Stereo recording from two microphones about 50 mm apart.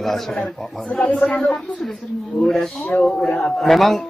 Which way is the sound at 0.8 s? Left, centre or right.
Left.